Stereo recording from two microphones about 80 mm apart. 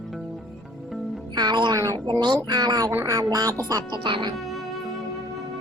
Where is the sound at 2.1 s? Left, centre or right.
Right.